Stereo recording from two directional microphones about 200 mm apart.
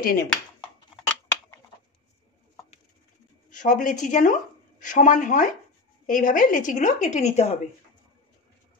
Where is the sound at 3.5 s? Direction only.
40° left (ahead or behind).